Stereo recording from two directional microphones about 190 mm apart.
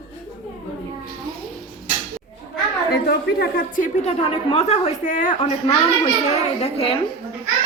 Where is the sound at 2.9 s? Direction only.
55° left (ahead or behind).